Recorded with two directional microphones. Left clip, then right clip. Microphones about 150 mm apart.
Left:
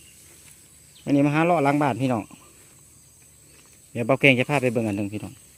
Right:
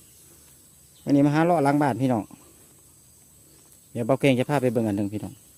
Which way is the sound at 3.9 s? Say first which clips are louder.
Left 3 dB; 15° right (ahead or behind).